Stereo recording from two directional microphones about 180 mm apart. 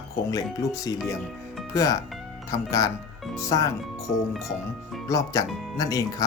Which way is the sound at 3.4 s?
20° left (ahead or behind).